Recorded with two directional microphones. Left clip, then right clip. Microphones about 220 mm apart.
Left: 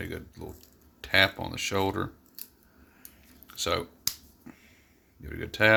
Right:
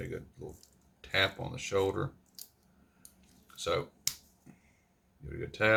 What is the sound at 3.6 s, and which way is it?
Speech, 60° left (ahead or behind).